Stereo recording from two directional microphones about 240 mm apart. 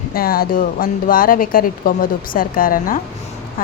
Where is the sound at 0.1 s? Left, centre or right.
Left.